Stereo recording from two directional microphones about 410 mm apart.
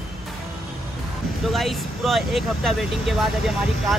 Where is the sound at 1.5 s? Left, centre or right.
Centre.